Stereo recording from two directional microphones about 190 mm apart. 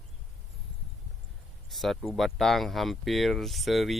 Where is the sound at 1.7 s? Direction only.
Centre (ahead or behind).